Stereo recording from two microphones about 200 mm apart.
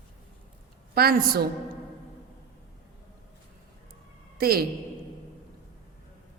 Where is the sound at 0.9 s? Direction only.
50° right (ahead or behind).